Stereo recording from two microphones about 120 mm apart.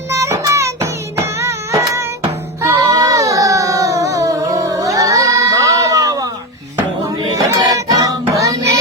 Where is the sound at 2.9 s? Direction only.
30° right (ahead or behind).